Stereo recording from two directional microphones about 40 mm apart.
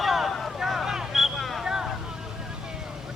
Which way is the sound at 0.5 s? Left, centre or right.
Centre.